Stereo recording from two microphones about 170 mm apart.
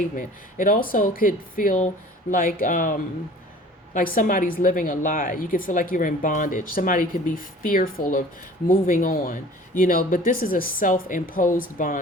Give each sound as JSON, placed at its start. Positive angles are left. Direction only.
{"t": 0.2, "sound": "a woman's voice", "side_deg": 55}